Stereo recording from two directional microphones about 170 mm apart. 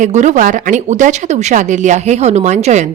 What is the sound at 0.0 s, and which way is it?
A woman's voice, 45° right (ahead or behind).